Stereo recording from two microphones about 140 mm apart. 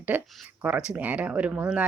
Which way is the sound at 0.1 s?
10° right (ahead or behind).